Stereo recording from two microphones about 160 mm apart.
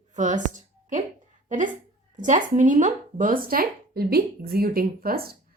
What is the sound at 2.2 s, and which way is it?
A woman's voice, 50° right (ahead or behind).